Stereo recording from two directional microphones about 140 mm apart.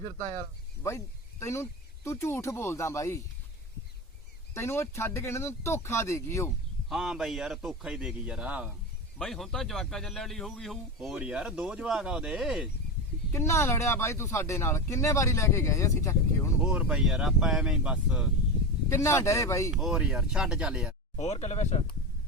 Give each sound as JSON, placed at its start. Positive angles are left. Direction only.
{"t": 0.8, "sound": "speech", "side_deg": 20}
{"t": 4.5, "sound": "speech", "side_deg": 20}
{"t": 6.8, "sound": "a man's voice", "side_deg": 0}
{"t": 9.1, "sound": "a man's voice", "side_deg": 0}
{"t": 13.3, "sound": "speech", "side_deg": 20}
{"t": 16.6, "sound": "a man's voice", "side_deg": -5}
{"t": 18.9, "sound": "speech", "side_deg": 20}
{"t": 19.7, "sound": "a man's voice", "side_deg": -5}
{"t": 21.2, "sound": "speech", "side_deg": 50}